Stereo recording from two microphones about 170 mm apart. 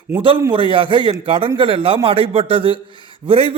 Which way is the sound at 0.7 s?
30° right (ahead or behind).